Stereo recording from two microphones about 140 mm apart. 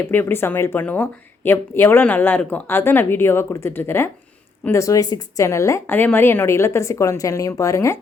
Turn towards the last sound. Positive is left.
turn(degrees=20)  # may be behind; listen again after turning